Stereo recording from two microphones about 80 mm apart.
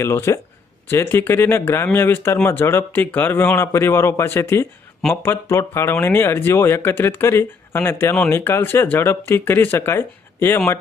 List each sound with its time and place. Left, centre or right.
0.0 s speech: left